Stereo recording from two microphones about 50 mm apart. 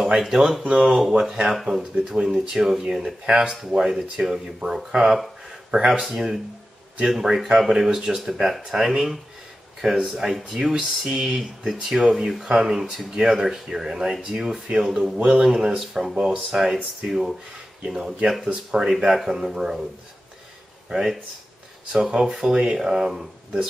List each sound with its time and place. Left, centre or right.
0.2 s speech: centre
7.4 s speech: centre
20.9 s speech: centre